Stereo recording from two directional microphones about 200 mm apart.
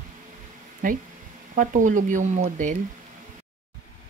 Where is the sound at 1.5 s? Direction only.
40° right (ahead or behind).